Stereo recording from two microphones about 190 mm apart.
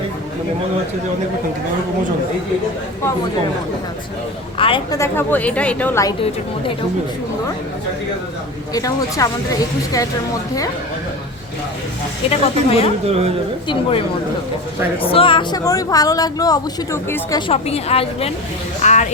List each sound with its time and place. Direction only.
4.5 s speech: 25° left (ahead or behind)
4.9 s speech: 10° left (ahead or behind)
8.7 s speech: 15° left (ahead or behind)
12.3 s a woman's voice: 30° left (ahead or behind)
13.1 s speech: 30° right (ahead or behind)
15.0 s speech: 30° left (ahead or behind)
17.5 s a woman's voice: 35° left (ahead or behind)